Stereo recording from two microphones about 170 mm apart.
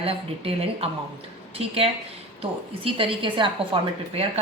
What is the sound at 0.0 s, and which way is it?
A woman's voice, 35° right (ahead or behind).